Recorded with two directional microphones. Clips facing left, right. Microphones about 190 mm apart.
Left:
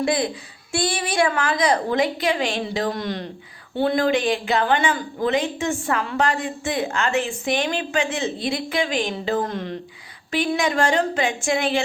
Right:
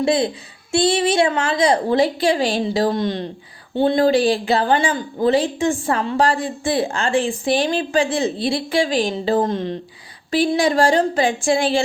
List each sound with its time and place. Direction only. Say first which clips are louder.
0.0 s a woman's voice: right 4 dB; 25° right (ahead or behind)